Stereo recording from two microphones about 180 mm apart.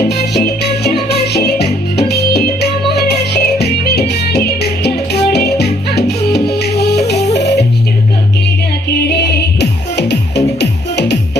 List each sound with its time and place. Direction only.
0.1 s music: 65° left (ahead or behind)
9.0 s music: 65° left (ahead or behind)